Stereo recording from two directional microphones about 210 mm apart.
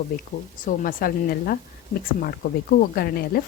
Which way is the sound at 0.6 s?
40° left (ahead or behind).